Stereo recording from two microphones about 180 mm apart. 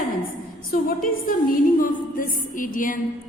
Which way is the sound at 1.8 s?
50° left (ahead or behind).